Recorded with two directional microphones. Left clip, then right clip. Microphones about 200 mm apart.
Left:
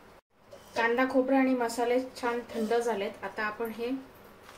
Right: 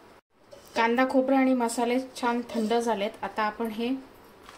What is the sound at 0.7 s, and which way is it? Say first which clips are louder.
A woman's voice: right 3 dB; 55° right (ahead or behind).